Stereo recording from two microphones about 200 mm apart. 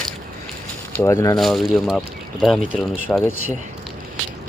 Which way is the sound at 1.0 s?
15° left (ahead or behind).